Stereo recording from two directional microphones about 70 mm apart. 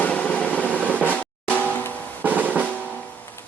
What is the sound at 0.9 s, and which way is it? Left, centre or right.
Music, left.